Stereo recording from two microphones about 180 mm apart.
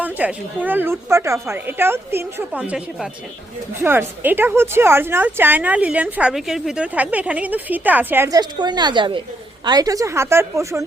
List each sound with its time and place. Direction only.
0.0 s a woman's voice: 10° right (ahead or behind)